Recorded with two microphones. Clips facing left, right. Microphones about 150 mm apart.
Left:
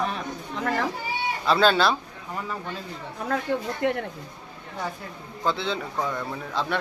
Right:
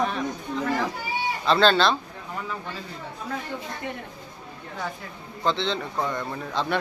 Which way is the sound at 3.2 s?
70° left (ahead or behind).